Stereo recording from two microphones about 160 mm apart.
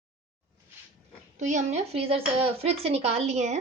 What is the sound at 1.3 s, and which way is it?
Speech, 45° right (ahead or behind).